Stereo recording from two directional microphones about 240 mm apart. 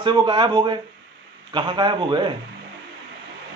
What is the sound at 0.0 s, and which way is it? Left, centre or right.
A man's voice, centre.